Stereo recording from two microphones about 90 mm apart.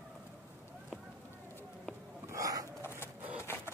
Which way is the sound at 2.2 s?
40° right (ahead or behind).